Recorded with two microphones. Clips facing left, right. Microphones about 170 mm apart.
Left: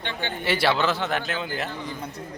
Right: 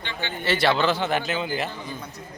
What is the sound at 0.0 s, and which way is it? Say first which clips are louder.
Speech: left 2 dB; 50° left (ahead or behind).